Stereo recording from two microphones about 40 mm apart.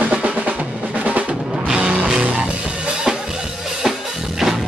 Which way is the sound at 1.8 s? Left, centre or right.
Right.